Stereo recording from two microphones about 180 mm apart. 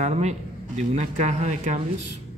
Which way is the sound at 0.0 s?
40° right (ahead or behind).